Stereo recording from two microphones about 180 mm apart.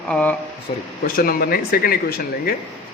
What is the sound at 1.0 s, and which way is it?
Speech, 55° left (ahead or behind).